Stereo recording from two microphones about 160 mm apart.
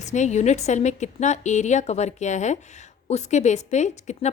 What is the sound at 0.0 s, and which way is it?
A woman's voice, 45° left (ahead or behind).